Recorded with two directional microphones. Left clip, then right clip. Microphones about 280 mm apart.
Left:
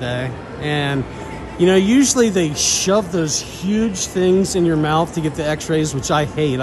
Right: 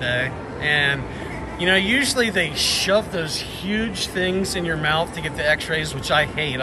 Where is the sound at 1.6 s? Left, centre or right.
Left.